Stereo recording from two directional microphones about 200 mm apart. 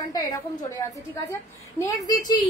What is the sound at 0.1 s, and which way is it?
A woman's voice, 20° left (ahead or behind).